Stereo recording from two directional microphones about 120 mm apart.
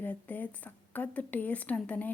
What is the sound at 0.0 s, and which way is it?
Speech, 15° left (ahead or behind).